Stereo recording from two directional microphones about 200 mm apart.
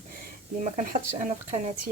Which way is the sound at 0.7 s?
40° right (ahead or behind).